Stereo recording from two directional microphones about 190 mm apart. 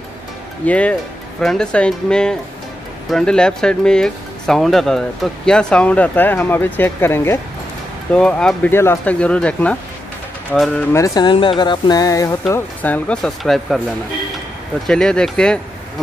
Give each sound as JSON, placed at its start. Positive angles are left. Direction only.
{"t": 0.7, "sound": "speech", "side_deg": 5}
{"t": 10.9, "sound": "speech", "side_deg": 20}
{"t": 14.9, "sound": "speech", "side_deg": 5}